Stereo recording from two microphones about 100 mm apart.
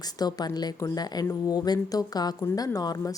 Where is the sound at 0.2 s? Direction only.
40° left (ahead or behind).